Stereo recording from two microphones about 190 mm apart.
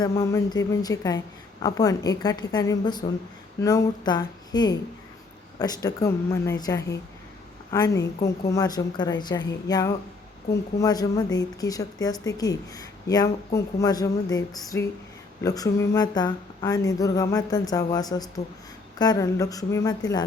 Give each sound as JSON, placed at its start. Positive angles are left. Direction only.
{"t": 0.0, "sound": "a woman's voice", "side_deg": 15}